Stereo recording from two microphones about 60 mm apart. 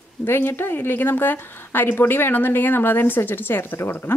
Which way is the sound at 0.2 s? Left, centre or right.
Left.